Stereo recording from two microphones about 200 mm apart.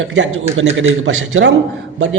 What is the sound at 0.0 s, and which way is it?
A man's voice, 70° right (ahead or behind).